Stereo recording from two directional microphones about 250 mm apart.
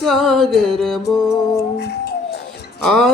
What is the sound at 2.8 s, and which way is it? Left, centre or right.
Music, centre.